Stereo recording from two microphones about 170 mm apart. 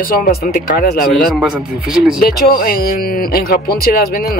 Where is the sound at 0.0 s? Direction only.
60° left (ahead or behind).